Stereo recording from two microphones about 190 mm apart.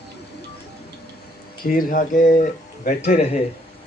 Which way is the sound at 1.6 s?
45° left (ahead or behind).